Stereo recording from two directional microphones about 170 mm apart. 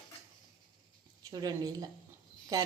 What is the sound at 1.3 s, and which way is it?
Speech, 20° right (ahead or behind).